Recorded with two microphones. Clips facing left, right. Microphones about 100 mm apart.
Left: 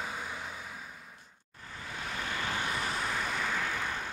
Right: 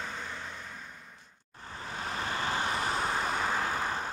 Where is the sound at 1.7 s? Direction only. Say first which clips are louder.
Right 3 dB; 35° right (ahead or behind).